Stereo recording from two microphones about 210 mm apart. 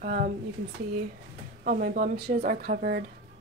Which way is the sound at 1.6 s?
40° right (ahead or behind).